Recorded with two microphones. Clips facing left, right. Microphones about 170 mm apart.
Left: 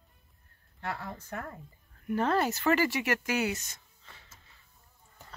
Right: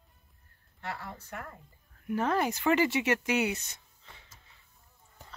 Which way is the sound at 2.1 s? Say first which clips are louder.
Left 1 dB; 10° right (ahead or behind).